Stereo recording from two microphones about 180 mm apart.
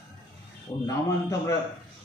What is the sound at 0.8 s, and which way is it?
Speech, 15° left (ahead or behind).